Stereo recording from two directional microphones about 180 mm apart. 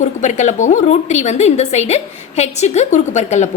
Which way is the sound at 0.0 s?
40° left (ahead or behind).